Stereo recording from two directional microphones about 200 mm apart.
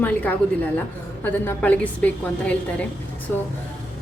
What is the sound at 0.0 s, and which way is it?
A woman's voice, 10° left (ahead or behind).